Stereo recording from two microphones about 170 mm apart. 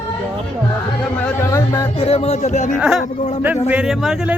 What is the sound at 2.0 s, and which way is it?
Speech, 35° left (ahead or behind).